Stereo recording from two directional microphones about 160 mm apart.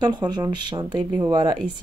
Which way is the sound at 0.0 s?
25° right (ahead or behind).